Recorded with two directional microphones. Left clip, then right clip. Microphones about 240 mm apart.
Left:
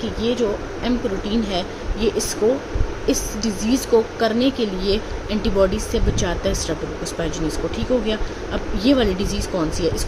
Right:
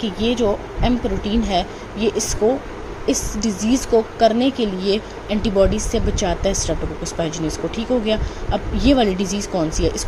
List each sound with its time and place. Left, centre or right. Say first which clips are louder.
0.0 s a woman's voice: right 2 dB; centre